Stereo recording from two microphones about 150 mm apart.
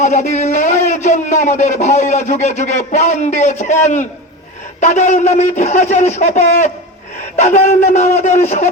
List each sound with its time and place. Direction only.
0.0 s a man's voice: 55° left (ahead or behind)